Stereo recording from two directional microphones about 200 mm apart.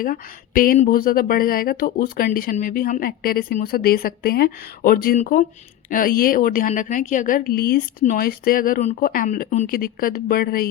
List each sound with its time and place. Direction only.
0.0 s speech: 45° left (ahead or behind)